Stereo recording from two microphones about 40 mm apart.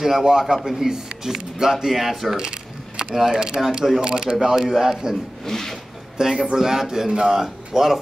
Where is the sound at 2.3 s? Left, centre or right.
Right.